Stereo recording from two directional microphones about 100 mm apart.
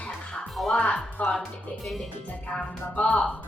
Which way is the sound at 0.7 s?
15° left (ahead or behind).